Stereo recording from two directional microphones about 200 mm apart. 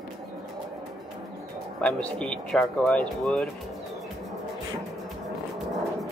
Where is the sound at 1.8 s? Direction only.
5° left (ahead or behind).